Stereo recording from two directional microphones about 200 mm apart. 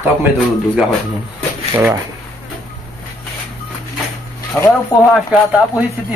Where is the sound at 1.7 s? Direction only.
15° right (ahead or behind).